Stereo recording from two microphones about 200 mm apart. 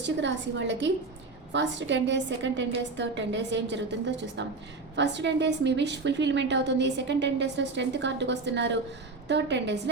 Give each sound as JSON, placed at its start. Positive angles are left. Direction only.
{"t": 0.0, "sound": "a woman's voice", "side_deg": -65}